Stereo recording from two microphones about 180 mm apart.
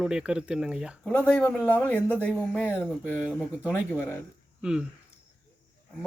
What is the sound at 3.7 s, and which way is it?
Speech, 15° left (ahead or behind).